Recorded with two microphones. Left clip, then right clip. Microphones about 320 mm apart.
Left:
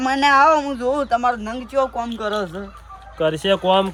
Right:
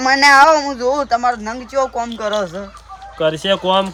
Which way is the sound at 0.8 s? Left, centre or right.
Centre.